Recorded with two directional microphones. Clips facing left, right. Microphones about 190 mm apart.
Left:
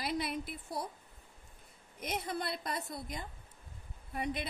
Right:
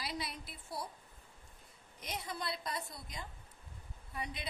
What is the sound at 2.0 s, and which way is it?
A woman's voice, 55° left (ahead or behind).